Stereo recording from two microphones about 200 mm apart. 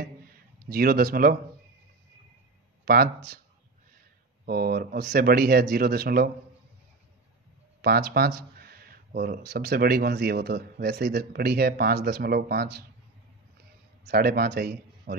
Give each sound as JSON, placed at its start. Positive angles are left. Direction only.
{"t": 0.7, "sound": "speech", "side_deg": -50}
{"t": 2.8, "sound": "speech", "side_deg": -50}
{"t": 4.5, "sound": "speech", "side_deg": -45}
{"t": 7.8, "sound": "speech", "side_deg": -50}
{"t": 14.0, "sound": "speech", "side_deg": -50}